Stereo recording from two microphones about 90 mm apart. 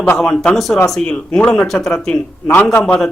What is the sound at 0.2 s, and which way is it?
A man's voice, 5° left (ahead or behind).